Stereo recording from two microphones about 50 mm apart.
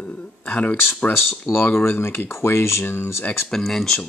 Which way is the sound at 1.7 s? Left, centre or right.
Left.